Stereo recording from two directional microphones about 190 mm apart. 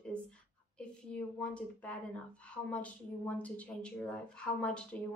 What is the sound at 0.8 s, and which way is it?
A woman's voice, 5° left (ahead or behind).